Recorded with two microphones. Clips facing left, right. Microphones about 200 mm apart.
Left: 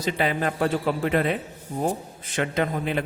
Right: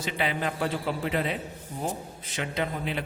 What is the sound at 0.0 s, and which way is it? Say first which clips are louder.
A man's voice: left 5 dB; 45° left (ahead or behind).